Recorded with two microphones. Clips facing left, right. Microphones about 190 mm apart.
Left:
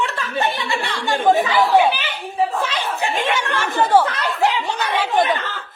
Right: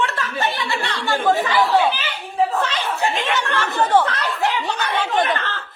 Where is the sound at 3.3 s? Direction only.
15° left (ahead or behind).